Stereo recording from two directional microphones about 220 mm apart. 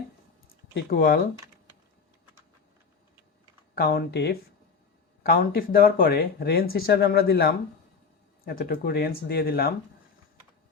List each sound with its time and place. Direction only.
0.4 s a sound: 55° left (ahead or behind)
0.9 s speech: 45° left (ahead or behind)
3.8 s speech: 45° left (ahead or behind)